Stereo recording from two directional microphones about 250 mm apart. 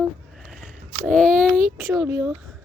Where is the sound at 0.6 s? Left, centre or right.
Centre.